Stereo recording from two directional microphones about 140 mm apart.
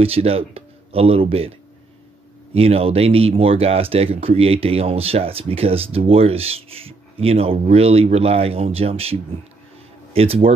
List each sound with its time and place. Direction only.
0.0 s speech: 45° right (ahead or behind)
2.5 s speech: 45° right (ahead or behind)